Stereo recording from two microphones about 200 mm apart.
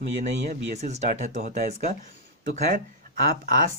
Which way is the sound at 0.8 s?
35° right (ahead or behind).